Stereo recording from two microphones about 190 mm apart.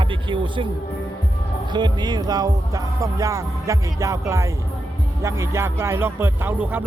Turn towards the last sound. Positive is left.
turn(degrees=-10)  # may be behind; listen again after turning